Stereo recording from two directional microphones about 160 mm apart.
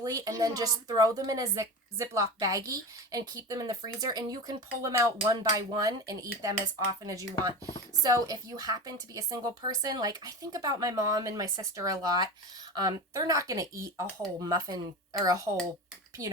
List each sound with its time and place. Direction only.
0.0 s speech: 20° right (ahead or behind)